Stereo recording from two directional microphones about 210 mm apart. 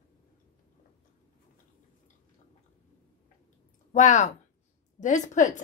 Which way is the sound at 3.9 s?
35° left (ahead or behind).